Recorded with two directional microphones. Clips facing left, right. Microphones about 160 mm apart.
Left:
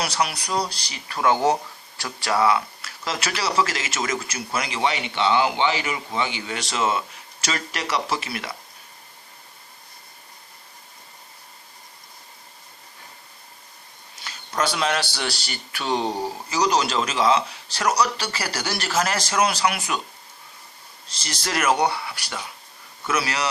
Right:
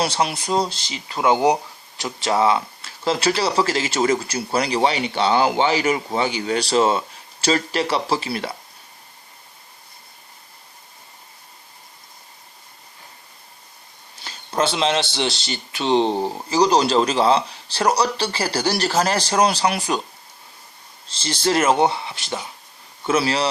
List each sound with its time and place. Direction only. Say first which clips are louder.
0.0 s speech: right 4 dB; 25° right (ahead or behind)
14.3 s speech: right 3 dB; 25° right (ahead or behind)
21.1 s speech: right 8 dB; 30° right (ahead or behind)